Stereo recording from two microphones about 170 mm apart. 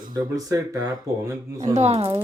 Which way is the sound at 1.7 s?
40° right (ahead or behind).